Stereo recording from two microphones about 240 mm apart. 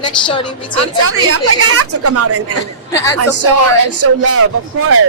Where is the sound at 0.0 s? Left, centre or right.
Centre.